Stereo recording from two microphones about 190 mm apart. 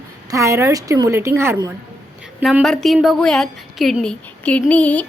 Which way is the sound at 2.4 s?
Centre (ahead or behind).